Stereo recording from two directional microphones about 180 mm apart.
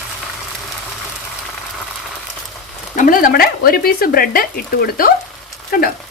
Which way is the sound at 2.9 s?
50° left (ahead or behind).